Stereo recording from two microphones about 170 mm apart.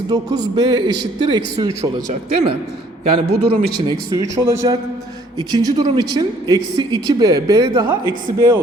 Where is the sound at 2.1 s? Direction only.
35° right (ahead or behind).